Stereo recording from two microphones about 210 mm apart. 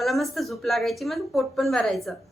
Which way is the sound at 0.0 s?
Centre (ahead or behind).